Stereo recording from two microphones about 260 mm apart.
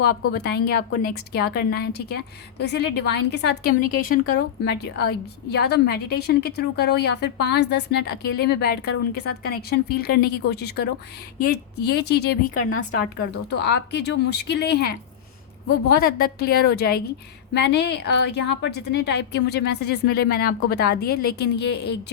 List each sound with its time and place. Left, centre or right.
0.3 s a woman's voice: left
13.5 s a woman's voice: left